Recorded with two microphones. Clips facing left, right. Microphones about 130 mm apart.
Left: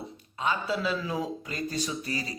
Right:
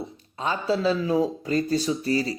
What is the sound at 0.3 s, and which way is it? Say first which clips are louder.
Speech: right 4 dB; 35° right (ahead or behind).